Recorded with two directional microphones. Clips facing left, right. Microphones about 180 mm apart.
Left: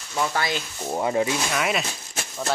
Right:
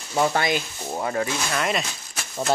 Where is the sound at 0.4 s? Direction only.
15° right (ahead or behind).